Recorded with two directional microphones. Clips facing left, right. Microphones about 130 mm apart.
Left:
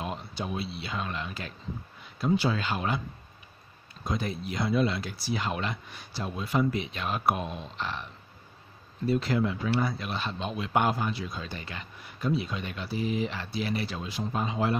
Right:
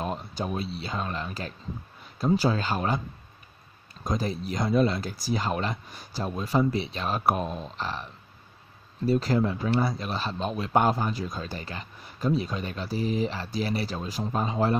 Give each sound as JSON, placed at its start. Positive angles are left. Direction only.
{"t": 0.0, "sound": "speech", "side_deg": -40}
{"t": 4.0, "sound": "speech", "side_deg": -40}
{"t": 9.0, "sound": "speech", "side_deg": -40}